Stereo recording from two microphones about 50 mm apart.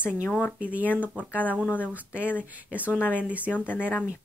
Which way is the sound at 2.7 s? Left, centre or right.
Right.